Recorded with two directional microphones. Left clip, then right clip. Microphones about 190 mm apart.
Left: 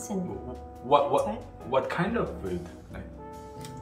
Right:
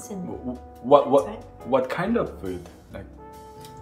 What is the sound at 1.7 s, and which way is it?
Speech, 50° right (ahead or behind).